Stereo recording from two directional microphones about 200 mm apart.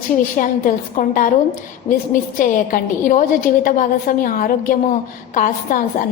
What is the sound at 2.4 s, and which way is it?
A woman's voice, 40° left (ahead or behind).